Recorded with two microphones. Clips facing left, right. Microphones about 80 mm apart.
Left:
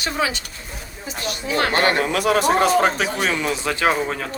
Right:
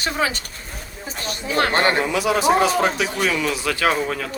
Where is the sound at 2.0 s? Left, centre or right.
Left.